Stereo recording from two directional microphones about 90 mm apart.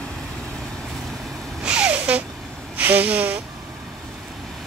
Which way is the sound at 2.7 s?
15° right (ahead or behind).